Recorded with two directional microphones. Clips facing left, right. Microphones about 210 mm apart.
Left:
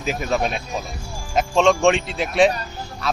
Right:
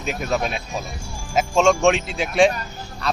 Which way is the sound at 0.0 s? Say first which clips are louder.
Left 1 dB; centre (ahead or behind).